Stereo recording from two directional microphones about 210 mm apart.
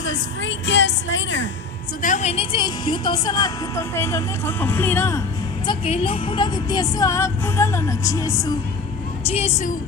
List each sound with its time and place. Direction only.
0.0 s a woman's voice: 60° left (ahead or behind)
2.0 s a woman's voice: 35° left (ahead or behind); by 5.2 s 10° left (ahead or behind)
5.6 s a woman's voice: 25° left (ahead or behind)
9.2 s a woman's voice: 30° left (ahead or behind)